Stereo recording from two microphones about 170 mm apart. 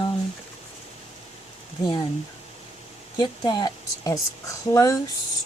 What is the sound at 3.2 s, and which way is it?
Speech, 25° left (ahead or behind).